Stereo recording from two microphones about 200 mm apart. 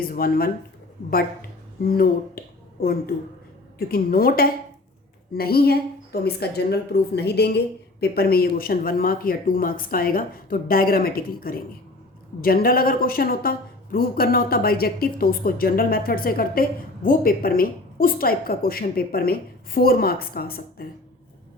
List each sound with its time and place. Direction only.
0.0 s a woman's voice: 45° left (ahead or behind)
1.8 s a woman's voice: 50° left (ahead or behind)
3.8 s a woman's voice: 50° left (ahead or behind)